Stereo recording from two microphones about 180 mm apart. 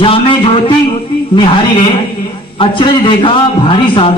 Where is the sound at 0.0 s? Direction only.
30° left (ahead or behind).